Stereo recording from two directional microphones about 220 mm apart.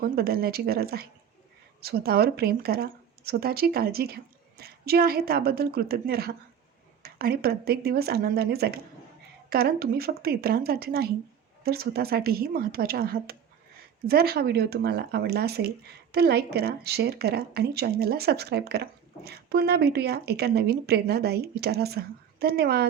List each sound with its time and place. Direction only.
0.0 s speech: 45° right (ahead or behind)